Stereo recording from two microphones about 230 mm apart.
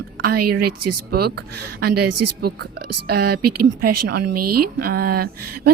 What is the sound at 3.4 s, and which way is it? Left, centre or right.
Speech, right.